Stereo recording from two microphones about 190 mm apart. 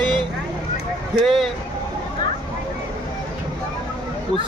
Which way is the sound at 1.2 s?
Centre (ahead or behind).